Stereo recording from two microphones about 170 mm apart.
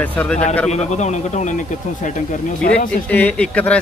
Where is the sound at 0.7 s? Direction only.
40° left (ahead or behind).